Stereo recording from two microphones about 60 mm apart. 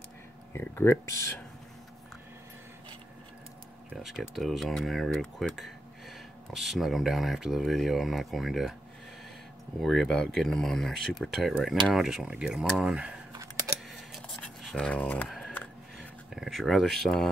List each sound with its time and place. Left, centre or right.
0.5 s speech: left
3.9 s speech: centre
9.8 s speech: centre
10.0 s speech: centre
11.6 s speech: centre
14.9 s speech: left
15.2 s a sound: centre
16.3 s speech: centre